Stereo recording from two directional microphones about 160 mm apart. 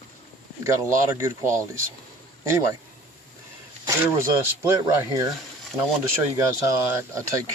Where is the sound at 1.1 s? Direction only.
15° right (ahead or behind).